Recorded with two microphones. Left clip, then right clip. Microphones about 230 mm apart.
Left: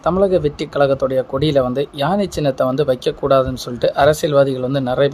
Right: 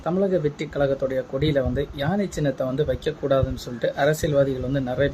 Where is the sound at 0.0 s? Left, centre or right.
Centre.